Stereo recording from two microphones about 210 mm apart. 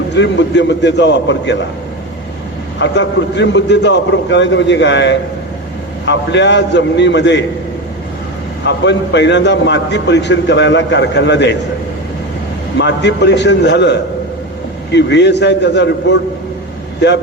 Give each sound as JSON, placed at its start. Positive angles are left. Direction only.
{"t": 0.1, "sound": "a man's voice", "side_deg": 55}
{"t": 2.7, "sound": "a man's voice", "side_deg": 60}
{"t": 8.6, "sound": "a man's voice", "side_deg": 55}
{"t": 12.7, "sound": "a man's voice", "side_deg": 55}